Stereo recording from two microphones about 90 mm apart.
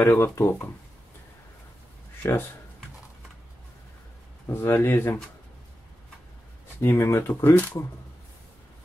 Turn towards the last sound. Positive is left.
turn(degrees=20)  # may be behind; listen again after turning